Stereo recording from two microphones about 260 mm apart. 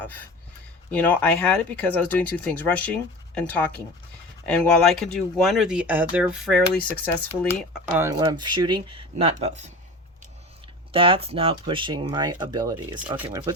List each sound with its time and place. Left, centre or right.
0.0 s speech: centre; by 9.7 s right
10.9 s speech: right
13.0 s speech: centre